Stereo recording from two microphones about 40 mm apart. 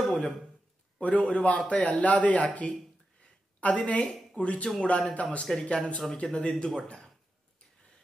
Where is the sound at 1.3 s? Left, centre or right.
Left.